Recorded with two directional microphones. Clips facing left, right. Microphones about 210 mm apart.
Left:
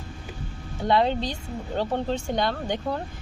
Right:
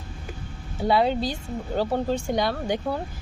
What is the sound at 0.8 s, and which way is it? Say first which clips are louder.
A woman's voice: right 1 dB; 5° right (ahead or behind).